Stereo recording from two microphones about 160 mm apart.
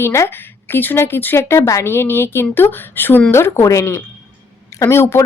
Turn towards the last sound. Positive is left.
turn(degrees=15)  # may be behind; listen again after turning